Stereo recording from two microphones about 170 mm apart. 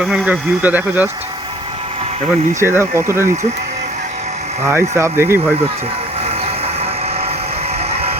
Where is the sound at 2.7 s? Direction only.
15° right (ahead or behind).